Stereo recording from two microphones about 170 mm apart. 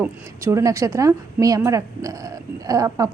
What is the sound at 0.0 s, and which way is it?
A woman's voice, 15° right (ahead or behind).